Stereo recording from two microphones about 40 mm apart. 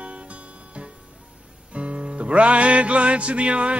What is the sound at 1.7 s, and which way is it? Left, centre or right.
Music, right.